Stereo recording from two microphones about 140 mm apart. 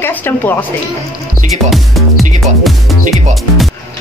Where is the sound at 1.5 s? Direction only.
Centre (ahead or behind).